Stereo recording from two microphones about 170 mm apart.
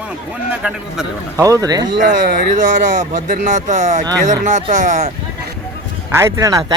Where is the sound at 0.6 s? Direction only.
5° right (ahead or behind).